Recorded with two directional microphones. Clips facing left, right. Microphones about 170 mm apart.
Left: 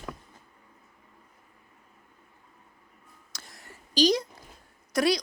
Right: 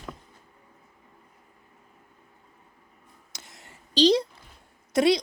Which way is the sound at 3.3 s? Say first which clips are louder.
Left 1 dB; 20° right (ahead or behind).